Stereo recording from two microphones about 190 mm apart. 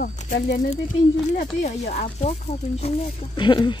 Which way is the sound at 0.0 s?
40° left (ahead or behind).